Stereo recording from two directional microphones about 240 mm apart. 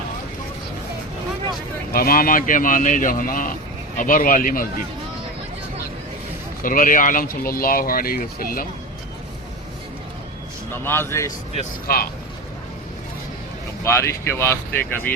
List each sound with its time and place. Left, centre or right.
1.9 s speech: left
6.6 s speech: left
10.8 s speech: centre
11.9 s speech: left
13.8 s speech: centre